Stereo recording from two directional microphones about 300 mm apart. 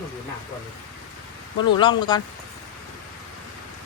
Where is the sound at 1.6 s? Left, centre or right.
Centre.